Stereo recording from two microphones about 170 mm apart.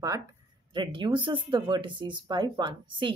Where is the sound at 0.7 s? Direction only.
30° right (ahead or behind).